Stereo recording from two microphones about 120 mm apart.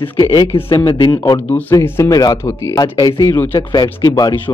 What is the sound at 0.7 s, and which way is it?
Speech, 45° left (ahead or behind).